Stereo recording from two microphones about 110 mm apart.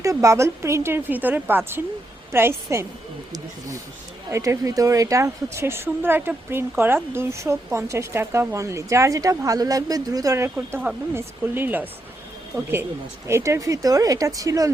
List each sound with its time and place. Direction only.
0.0 s a woman's voice: 30° right (ahead or behind)
4.3 s a woman's voice: 30° right (ahead or behind)
13.2 s speech: 25° right (ahead or behind)